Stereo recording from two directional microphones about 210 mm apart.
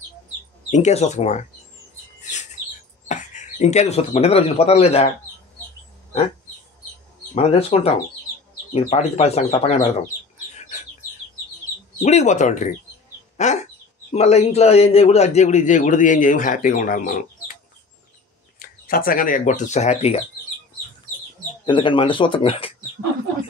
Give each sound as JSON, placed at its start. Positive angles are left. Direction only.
{"t": 0.7, "sound": "a man's voice", "side_deg": 35}
{"t": 3.1, "sound": "speech", "side_deg": 35}
{"t": 7.3, "sound": "a man's voice", "side_deg": 30}
{"t": 12.0, "sound": "a man's voice", "side_deg": 35}
{"t": 18.6, "sound": "speech", "side_deg": 45}
{"t": 21.6, "sound": "speech", "side_deg": 25}